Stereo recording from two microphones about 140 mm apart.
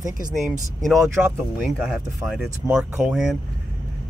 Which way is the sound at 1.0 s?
15° right (ahead or behind).